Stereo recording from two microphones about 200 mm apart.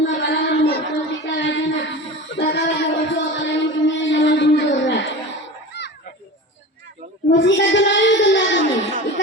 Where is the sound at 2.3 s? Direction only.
55° left (ahead or behind).